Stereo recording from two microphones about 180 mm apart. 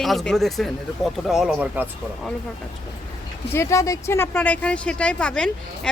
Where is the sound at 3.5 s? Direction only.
15° left (ahead or behind).